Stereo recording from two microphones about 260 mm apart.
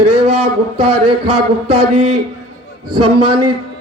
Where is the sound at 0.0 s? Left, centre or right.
Right.